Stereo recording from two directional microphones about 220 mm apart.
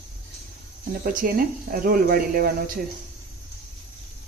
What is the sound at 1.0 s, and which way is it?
Speech, 40° right (ahead or behind).